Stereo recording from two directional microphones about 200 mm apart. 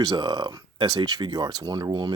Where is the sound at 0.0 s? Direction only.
20° right (ahead or behind).